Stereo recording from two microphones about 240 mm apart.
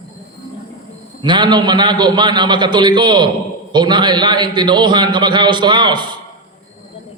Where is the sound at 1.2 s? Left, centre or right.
Centre.